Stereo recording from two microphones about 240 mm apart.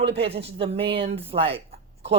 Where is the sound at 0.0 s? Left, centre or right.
Right.